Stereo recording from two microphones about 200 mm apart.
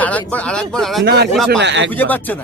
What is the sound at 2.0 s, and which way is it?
Speech, 10° left (ahead or behind).